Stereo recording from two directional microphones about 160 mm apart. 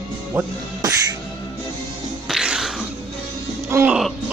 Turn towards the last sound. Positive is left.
turn(degrees=-15)  # may be behind; listen again after turning